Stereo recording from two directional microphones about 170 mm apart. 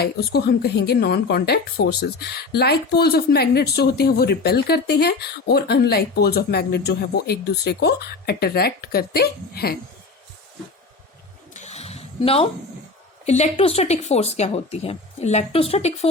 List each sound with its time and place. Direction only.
0.0 s a woman's voice: 70° left (ahead or behind)
11.5 s a sound: 40° left (ahead or behind)
13.2 s speech: 40° left (ahead or behind)